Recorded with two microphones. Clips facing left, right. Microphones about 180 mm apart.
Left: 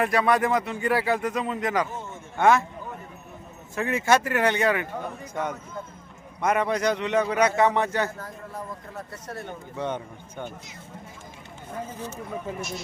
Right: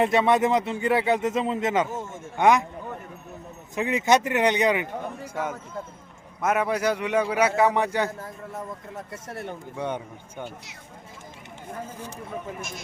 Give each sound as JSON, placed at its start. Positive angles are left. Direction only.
{"t": 0.0, "sound": "speech", "side_deg": -25}
{"t": 3.8, "sound": "speech", "side_deg": -20}
{"t": 9.7, "sound": "speech", "side_deg": -10}